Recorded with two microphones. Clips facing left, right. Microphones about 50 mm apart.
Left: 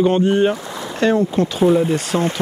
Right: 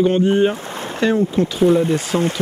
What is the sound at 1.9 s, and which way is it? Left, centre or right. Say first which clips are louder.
Speech: even; left.